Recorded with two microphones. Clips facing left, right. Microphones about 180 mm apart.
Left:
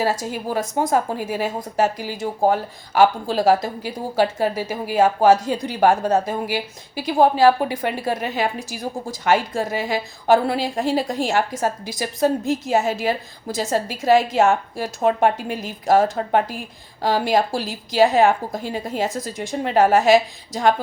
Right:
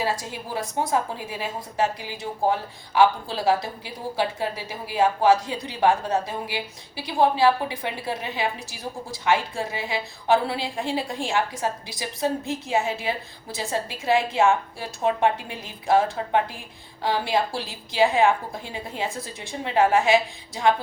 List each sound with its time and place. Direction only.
0.0 s a woman's voice: 45° left (ahead or behind)